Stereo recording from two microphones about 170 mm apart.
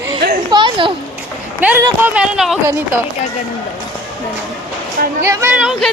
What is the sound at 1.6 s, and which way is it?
Speech, 10° right (ahead or behind).